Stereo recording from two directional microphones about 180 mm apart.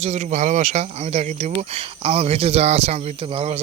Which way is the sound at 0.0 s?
40° right (ahead or behind).